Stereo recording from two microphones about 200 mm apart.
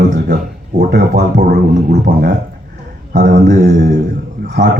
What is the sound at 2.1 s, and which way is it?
Speech, 45° right (ahead or behind).